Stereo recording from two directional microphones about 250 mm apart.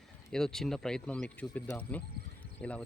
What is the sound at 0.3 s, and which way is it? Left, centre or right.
Speech, centre.